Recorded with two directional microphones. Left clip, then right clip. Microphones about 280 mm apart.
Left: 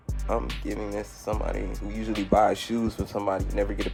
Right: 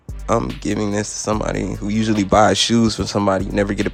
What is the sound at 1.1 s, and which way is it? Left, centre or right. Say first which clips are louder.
Speech: right 10 dB; right.